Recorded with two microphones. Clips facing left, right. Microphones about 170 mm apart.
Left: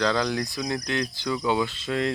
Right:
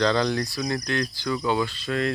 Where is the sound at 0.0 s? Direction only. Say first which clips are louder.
Right 2 dB; 5° left (ahead or behind).